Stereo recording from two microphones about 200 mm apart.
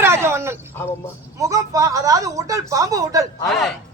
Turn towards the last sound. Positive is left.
turn(degrees=0)  # may be behind; listen again after turning